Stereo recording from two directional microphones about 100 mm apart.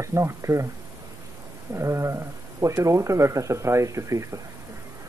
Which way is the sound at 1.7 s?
30° right (ahead or behind).